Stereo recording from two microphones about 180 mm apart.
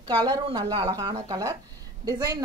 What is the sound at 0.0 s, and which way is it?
A woman's voice, 20° right (ahead or behind).